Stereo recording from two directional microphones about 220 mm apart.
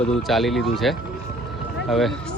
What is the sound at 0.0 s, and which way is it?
Speech, centre (ahead or behind).